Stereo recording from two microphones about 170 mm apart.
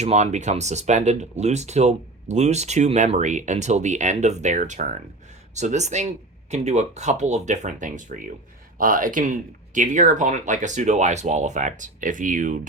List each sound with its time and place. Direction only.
0.0 s speech: 40° right (ahead or behind)